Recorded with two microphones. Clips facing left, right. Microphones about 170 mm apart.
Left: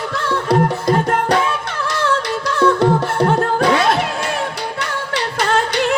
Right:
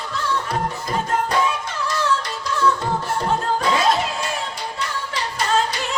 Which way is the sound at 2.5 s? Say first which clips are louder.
Left 7 dB; 70° left (ahead or behind).